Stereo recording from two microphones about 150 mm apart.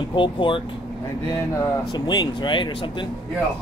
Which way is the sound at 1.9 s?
30° left (ahead or behind).